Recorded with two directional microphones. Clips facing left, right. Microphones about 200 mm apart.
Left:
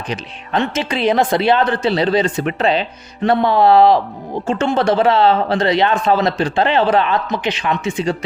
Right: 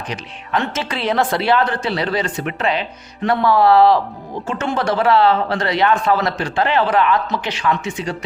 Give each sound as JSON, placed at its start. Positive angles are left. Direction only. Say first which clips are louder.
{"t": 0.1, "sound": "speech", "louder": "left 2 dB", "side_deg": 20}